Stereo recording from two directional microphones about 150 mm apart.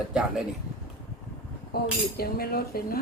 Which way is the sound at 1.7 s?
90° left.